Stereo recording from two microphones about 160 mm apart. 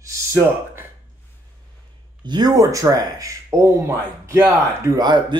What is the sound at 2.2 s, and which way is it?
Speech, 25° right (ahead or behind).